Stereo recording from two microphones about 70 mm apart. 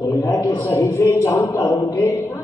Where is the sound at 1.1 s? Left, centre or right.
Left.